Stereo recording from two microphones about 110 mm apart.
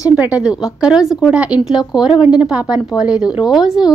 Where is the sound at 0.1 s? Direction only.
10° right (ahead or behind).